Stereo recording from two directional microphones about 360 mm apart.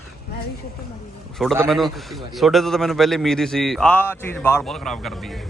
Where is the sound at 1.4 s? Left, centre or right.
Centre.